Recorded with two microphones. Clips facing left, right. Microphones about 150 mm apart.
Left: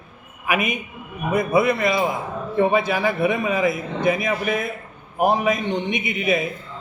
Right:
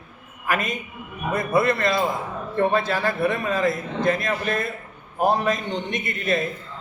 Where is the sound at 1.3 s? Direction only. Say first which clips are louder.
Left 2 dB; centre (ahead or behind).